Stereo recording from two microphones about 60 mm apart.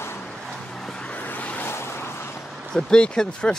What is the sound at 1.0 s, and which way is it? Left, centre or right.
Vehicle, left.